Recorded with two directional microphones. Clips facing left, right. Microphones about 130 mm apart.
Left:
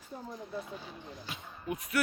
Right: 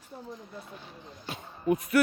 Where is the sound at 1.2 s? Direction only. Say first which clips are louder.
Right 11 dB; 40° right (ahead or behind).